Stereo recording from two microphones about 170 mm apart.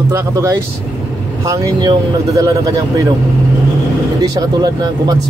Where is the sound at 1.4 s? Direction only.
20° right (ahead or behind).